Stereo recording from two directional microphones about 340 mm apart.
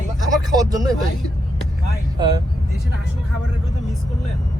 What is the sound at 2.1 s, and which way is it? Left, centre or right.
Speech, centre.